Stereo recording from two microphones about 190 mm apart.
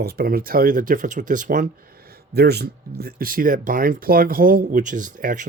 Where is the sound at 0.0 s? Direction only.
55° right (ahead or behind).